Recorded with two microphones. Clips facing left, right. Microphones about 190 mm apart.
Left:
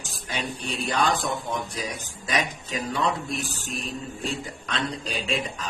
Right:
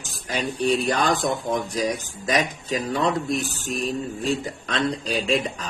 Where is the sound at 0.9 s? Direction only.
40° right (ahead or behind).